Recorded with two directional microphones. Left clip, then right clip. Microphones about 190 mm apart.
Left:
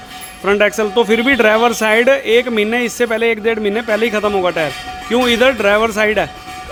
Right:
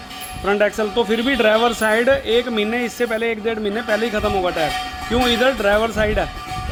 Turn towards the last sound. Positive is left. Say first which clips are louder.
# left 5 dB
turn(degrees=30)  # may be behind; listen again after turning